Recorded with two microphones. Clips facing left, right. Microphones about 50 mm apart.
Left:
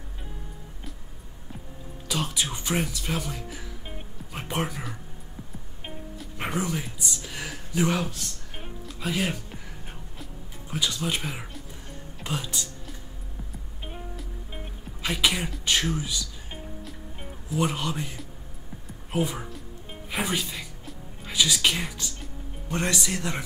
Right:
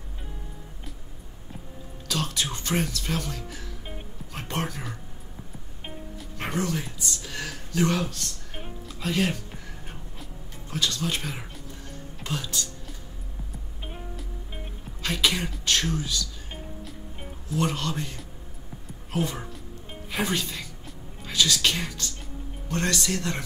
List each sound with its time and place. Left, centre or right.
2.0 s speech: centre
6.3 s speech: centre
8.5 s music: centre
10.7 s speech: centre
13.8 s music: centre
15.0 s speech: centre
16.8 s music: centre
17.6 s speech: centre
19.9 s music: centre
22.7 s speech: centre